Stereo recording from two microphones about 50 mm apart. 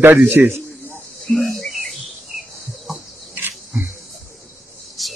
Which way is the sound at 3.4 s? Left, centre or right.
Right.